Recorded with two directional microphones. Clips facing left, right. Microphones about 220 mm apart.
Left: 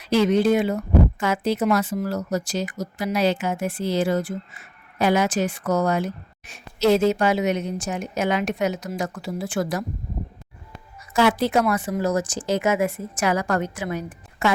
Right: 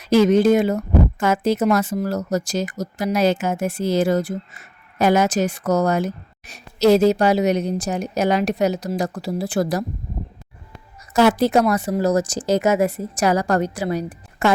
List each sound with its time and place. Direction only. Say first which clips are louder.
0.0 s speech: right 4 dB; 45° right (ahead or behind)
11.1 s speech: right 4 dB; 40° right (ahead or behind)